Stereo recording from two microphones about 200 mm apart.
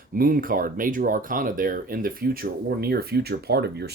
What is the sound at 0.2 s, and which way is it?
Speech, 45° right (ahead or behind).